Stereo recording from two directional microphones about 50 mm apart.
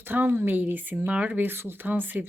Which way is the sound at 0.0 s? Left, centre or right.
Right.